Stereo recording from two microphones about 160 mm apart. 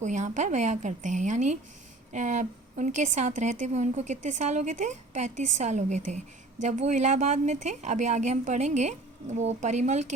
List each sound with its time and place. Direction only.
0.0 s a woman's voice: 50° right (ahead or behind)